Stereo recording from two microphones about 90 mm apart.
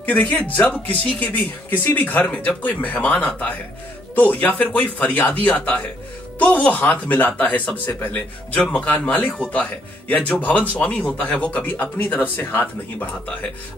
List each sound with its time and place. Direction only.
0.0 s speech: 15° left (ahead or behind)